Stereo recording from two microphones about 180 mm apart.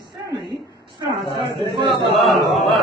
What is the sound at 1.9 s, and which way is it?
Speech, centre (ahead or behind).